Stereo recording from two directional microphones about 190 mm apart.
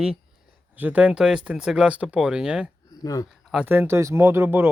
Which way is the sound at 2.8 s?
20° left (ahead or behind).